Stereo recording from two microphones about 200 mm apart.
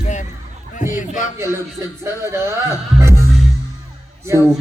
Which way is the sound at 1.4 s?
15° right (ahead or behind).